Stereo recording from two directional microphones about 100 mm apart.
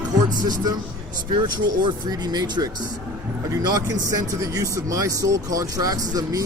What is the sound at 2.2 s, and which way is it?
Speech, 45° right (ahead or behind).